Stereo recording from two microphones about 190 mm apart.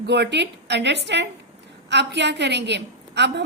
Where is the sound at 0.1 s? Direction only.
65° right (ahead or behind).